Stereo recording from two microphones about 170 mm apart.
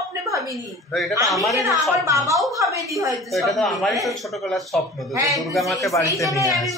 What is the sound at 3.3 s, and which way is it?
Speech, centre (ahead or behind).